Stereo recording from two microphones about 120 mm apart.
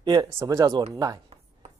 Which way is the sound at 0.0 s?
30° right (ahead or behind).